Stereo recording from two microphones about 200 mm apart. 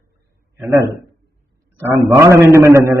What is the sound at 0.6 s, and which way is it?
A man's voice, 10° right (ahead or behind).